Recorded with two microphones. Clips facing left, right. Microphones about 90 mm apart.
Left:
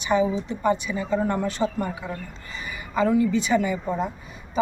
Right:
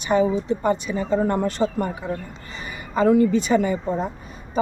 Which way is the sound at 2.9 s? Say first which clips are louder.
Right 4 dB; 50° right (ahead or behind).